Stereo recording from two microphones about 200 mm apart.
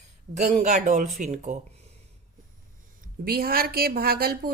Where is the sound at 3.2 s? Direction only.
50° right (ahead or behind).